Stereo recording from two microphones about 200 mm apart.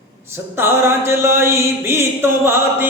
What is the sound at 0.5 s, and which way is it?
Speech, 10° right (ahead or behind).